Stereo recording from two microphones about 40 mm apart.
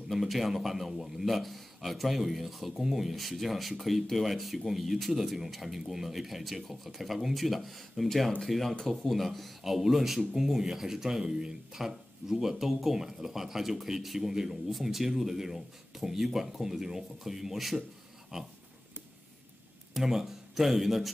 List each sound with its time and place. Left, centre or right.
0.1 s a man's voice: centre
18.3 s a sound: centre
19.9 s speech: centre